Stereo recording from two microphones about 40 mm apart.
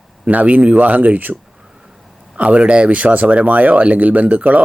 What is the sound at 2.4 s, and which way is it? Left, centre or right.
Speech, right.